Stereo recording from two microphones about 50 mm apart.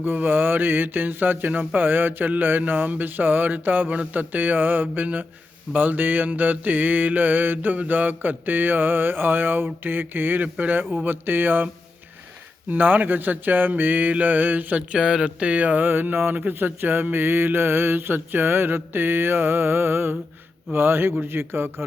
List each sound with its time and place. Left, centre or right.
0.0 s speech: right
14.8 s speech: centre; by 16.3 s right
16.3 s mantra: right